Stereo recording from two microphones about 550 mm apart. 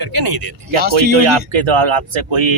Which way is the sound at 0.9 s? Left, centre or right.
Right.